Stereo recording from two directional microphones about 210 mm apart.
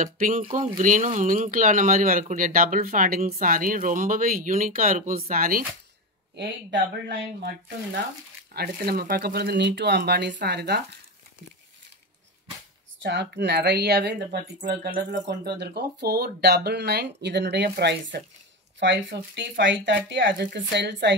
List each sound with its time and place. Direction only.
0.0 s speech: 40° right (ahead or behind)
6.3 s speech: 55° right (ahead or behind)
8.5 s speech: 45° right (ahead or behind)
13.0 s speech: 55° right (ahead or behind)